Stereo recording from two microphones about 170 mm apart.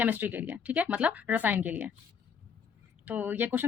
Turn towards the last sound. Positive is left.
turn(degrees=-10)  # may be behind; listen again after turning